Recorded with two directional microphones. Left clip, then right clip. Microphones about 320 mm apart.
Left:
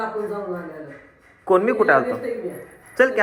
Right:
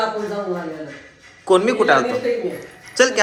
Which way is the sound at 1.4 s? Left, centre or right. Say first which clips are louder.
Right 2 dB; centre.